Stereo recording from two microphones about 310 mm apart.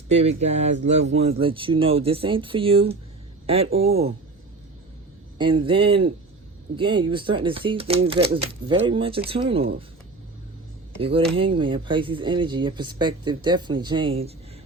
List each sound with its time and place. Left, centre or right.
0.1 s speech: centre
5.4 s speech: centre
11.3 s speech: centre